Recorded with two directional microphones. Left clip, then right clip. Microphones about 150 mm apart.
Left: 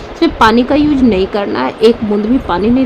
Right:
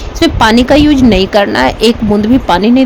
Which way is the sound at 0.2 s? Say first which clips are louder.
Right 1 dB; 60° right (ahead or behind).